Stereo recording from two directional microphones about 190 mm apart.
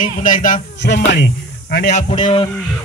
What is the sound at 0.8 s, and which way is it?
Speech, 65° left (ahead or behind).